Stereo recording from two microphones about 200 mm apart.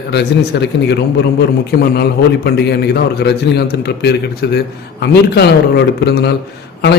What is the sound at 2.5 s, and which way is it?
Speech, 55° left (ahead or behind).